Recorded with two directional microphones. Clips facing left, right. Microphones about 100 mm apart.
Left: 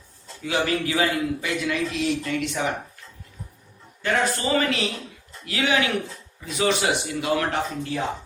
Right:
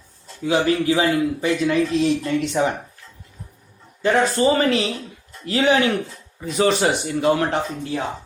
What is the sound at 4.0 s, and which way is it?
Speech, 30° right (ahead or behind).